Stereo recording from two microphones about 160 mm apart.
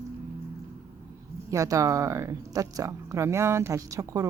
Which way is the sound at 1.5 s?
20° right (ahead or behind).